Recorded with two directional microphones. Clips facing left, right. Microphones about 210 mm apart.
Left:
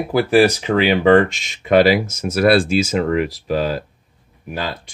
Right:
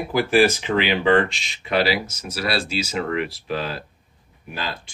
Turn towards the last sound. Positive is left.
turn(degrees=40)  # may be behind; listen again after turning